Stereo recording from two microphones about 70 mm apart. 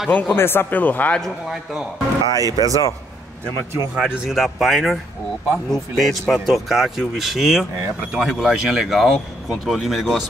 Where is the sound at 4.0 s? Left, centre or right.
Centre.